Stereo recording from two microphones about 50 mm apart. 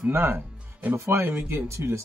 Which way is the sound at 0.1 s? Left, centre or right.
Right.